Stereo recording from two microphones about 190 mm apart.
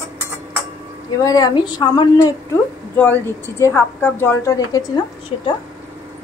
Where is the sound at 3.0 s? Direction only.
10° left (ahead or behind).